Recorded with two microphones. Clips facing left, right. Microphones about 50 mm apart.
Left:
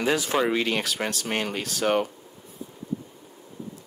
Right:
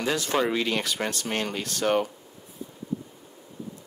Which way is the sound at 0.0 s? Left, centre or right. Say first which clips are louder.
Left 3 dB; centre.